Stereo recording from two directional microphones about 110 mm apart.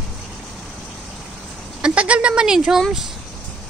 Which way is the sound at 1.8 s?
10° right (ahead or behind).